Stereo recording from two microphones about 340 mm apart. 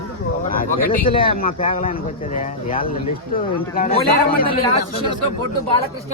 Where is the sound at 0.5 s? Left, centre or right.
Left.